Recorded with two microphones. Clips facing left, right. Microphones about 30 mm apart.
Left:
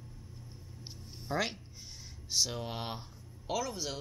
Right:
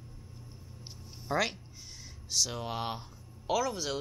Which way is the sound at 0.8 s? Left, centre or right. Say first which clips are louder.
Left 1 dB; centre.